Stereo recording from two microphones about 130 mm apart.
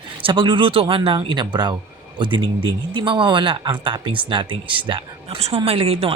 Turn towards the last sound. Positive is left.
turn(degrees=-50)  # may be behind; listen again after turning